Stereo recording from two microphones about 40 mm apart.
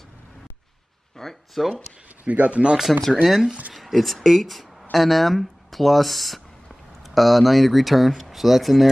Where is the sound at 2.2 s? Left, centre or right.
Right.